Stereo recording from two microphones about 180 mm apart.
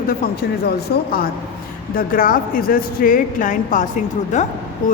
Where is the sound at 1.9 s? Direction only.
50° left (ahead or behind).